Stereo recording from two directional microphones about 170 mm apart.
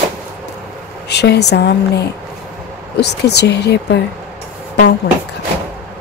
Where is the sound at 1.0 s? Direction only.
75° left (ahead or behind).